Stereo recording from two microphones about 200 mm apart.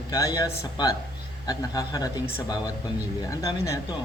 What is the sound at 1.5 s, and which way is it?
Speech, 15° left (ahead or behind).